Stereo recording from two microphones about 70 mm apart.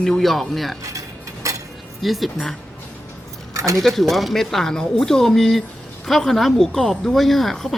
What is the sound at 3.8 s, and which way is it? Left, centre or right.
A woman's voice, centre.